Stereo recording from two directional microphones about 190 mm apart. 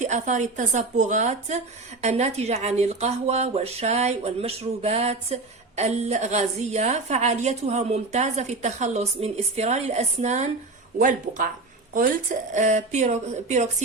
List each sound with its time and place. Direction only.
0.0 s a woman's voice: 40° right (ahead or behind)